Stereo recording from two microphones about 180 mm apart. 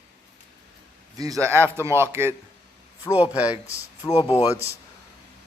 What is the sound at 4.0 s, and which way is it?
Speech, 20° left (ahead or behind).